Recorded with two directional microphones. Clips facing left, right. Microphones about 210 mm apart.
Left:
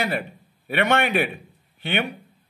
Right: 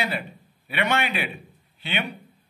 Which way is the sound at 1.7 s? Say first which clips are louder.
Left 5 dB; 55° left (ahead or behind).